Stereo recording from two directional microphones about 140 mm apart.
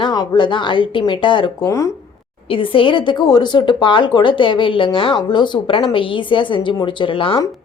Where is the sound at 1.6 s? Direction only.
20° left (ahead or behind).